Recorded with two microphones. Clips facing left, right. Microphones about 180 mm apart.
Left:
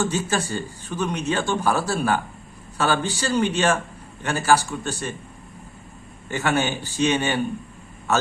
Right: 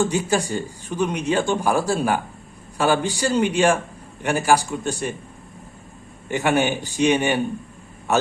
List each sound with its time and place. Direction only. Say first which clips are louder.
0.0 s a man's voice: right 3 dB; 15° right (ahead or behind)
6.3 s a man's voice: right 3 dB; 15° right (ahead or behind)